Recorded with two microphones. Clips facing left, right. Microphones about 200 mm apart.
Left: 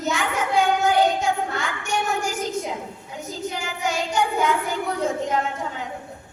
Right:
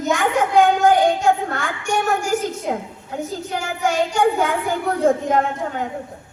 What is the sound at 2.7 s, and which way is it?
Speech, 50° right (ahead or behind).